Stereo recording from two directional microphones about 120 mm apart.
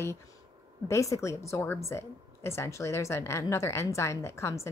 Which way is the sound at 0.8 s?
25° left (ahead or behind).